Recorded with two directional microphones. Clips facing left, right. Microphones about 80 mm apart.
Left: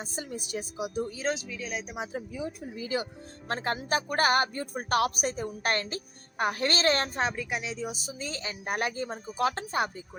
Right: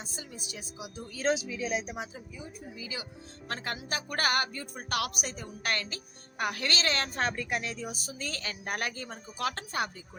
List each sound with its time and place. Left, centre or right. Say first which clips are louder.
0.0 s a woman's voice: left 7 dB; left
1.3 s speech: right 3 dB; centre
2.1 s speech: left 10 dB; left
2.7 s a woman's voice: left 10 dB; left
3.5 s speech: left 6 dB; left
7.2 s speech: left 1 dB; centre
7.7 s speech: left 3 dB; left